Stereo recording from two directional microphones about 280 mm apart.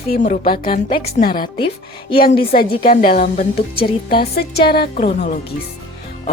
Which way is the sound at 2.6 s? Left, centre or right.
Left.